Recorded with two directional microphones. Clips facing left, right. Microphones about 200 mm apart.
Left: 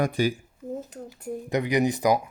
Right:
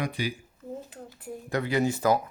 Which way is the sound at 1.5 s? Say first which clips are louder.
Left 2 dB; 15° left (ahead or behind).